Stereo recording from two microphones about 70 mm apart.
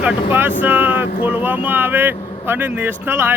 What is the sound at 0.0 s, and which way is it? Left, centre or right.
Speech, right.